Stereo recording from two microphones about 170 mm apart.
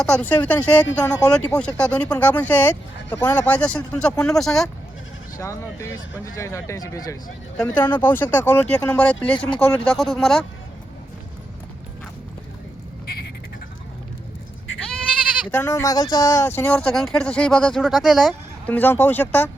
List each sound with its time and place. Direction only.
0.0 s speech: 10° left (ahead or behind)
5.4 s speech: 15° left (ahead or behind)
7.5 s speech: 5° left (ahead or behind)
15.4 s speech: 15° left (ahead or behind)